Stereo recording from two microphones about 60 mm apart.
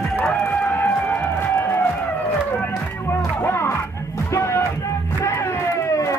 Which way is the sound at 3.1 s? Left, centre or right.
Left.